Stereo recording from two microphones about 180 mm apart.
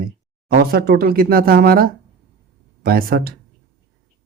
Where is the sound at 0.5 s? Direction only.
55° right (ahead or behind).